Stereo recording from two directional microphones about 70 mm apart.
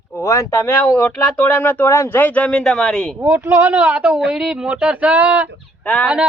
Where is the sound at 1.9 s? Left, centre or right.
Left.